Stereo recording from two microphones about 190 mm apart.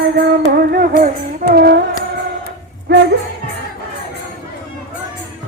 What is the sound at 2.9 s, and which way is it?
Music, 65° right (ahead or behind).